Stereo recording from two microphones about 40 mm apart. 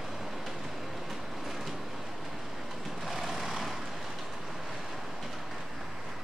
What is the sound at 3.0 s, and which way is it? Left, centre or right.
Vehicle, centre.